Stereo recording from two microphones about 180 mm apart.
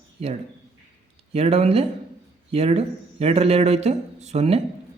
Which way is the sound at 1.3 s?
35° right (ahead or behind).